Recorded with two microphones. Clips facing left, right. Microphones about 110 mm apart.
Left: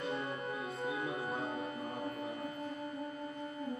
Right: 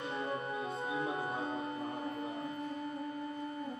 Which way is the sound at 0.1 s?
30° right (ahead or behind).